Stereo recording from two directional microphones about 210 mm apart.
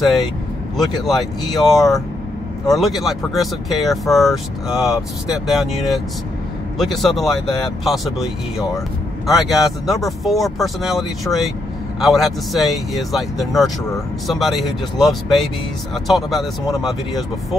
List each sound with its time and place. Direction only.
0.7 s speech: centre (ahead or behind)
1.6 s speech: 15° left (ahead or behind)
2.7 s speech: centre (ahead or behind)